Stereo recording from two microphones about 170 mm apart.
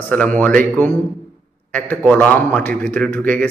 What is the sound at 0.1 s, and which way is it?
A man's voice, 10° left (ahead or behind).